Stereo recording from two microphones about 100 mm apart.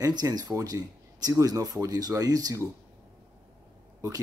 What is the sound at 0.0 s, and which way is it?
Speech, 40° right (ahead or behind).